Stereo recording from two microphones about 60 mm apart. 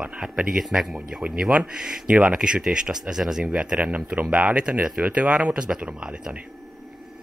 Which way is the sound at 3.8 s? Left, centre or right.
Right.